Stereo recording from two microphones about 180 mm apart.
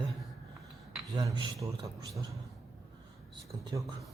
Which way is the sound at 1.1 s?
25° right (ahead or behind).